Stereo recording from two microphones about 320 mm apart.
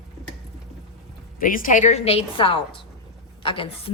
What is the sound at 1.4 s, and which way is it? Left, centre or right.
A woman's voice, left.